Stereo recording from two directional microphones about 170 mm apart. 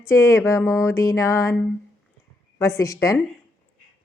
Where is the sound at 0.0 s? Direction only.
15° left (ahead or behind).